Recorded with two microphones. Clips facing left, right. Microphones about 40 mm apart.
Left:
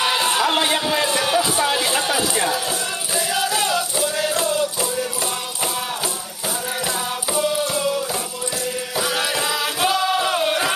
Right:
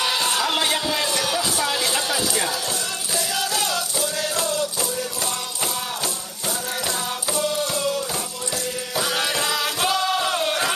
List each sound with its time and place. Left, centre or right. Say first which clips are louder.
0.0 s a sound: left 3 dB; centre
3.2 s music: left 4 dB; centre
7.3 s music: left 3 dB; centre